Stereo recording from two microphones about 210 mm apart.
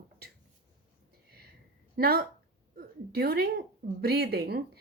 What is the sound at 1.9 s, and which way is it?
A woman's voice, 45° right (ahead or behind).